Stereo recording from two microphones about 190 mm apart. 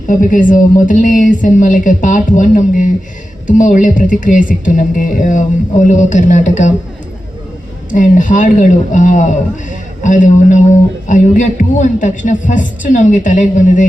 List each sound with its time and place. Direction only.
0.1 s speech: 45° left (ahead or behind)
7.9 s speech: 45° left (ahead or behind)